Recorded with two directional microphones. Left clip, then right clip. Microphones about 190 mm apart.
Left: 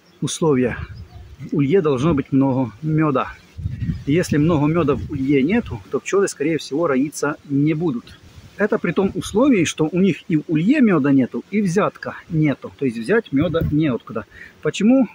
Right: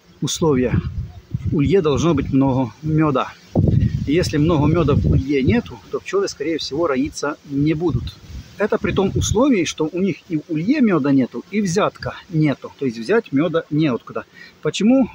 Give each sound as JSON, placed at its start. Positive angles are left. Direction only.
{"t": 0.2, "sound": "speech", "side_deg": 0}